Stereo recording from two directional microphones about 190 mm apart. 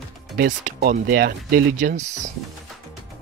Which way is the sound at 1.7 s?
40° right (ahead or behind).